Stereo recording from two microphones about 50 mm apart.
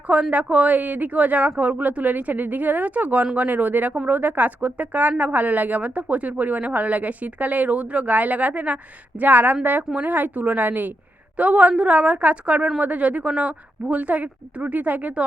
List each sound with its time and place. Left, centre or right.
0.1 s a woman's voice: right